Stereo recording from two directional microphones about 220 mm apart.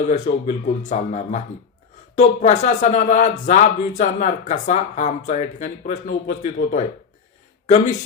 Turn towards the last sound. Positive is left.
turn(degrees=30)  # may be behind; listen again after turning